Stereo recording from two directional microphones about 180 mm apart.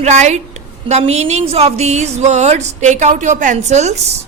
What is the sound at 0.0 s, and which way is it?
A woman's voice, 40° right (ahead or behind).